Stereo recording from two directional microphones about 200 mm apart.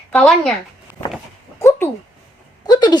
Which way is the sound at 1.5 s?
15° left (ahead or behind).